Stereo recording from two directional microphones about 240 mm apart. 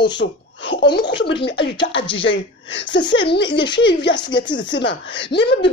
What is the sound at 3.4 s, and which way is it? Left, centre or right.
Speech, centre.